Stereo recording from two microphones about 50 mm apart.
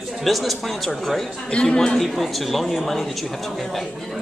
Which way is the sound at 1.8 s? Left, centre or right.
Centre.